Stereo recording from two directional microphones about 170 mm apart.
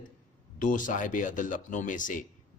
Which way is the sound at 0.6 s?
50° left (ahead or behind).